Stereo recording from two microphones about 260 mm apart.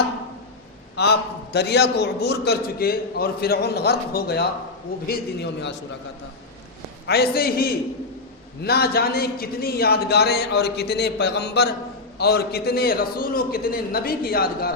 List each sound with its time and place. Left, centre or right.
0.9 s a man's voice: left
7.1 s a man's voice: left